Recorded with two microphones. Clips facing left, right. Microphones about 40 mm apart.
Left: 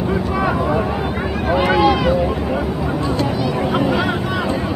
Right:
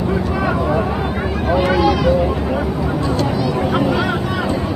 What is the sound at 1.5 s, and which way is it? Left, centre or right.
Run, centre.